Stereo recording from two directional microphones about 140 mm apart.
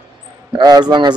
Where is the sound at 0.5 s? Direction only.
30° right (ahead or behind).